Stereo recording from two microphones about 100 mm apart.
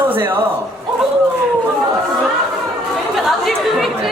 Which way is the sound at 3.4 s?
Centre (ahead or behind).